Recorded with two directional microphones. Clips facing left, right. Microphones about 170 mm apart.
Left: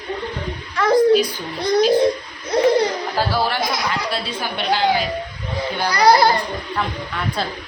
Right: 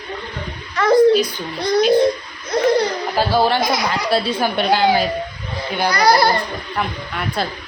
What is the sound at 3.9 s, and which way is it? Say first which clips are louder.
Speech: right 5 dB; 40° right (ahead or behind).